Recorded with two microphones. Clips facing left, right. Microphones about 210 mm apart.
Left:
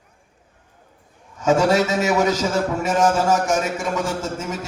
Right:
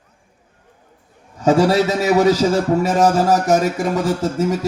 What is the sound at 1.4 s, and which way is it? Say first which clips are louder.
A man's voice: right 3 dB; 35° right (ahead or behind).